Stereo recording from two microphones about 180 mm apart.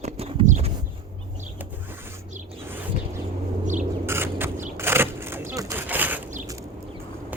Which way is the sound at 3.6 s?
45° right (ahead or behind).